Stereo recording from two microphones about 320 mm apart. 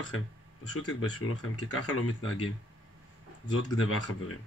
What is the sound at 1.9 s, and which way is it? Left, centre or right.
Speech, left.